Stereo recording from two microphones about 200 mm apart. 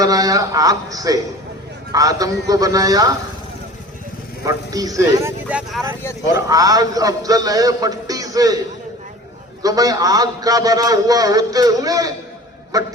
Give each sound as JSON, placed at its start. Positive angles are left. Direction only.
{"t": 0.0, "sound": "a man's voice", "side_deg": -20}
{"t": 4.4, "sound": "a man's voice", "side_deg": -20}
{"t": 9.6, "sound": "a man's voice", "side_deg": -20}